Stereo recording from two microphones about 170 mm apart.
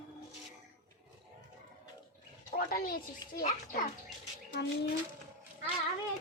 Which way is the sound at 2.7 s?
60° left (ahead or behind).